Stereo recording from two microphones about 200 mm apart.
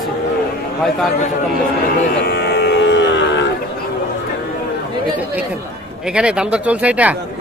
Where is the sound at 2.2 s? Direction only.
55° left (ahead or behind).